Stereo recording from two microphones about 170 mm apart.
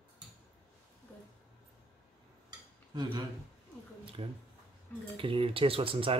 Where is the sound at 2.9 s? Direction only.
25° right (ahead or behind).